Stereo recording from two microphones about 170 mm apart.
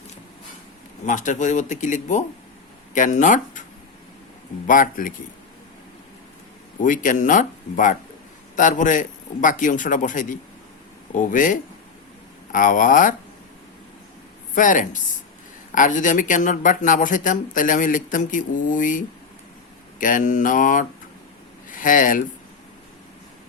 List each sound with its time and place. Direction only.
1.0 s speech: 50° left (ahead or behind)
4.6 s speech: 50° left (ahead or behind)
6.8 s speech: 50° left (ahead or behind)
14.5 s speech: 50° left (ahead or behind)